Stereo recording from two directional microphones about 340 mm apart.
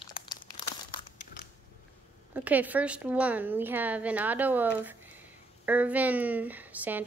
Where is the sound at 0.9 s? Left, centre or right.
Centre.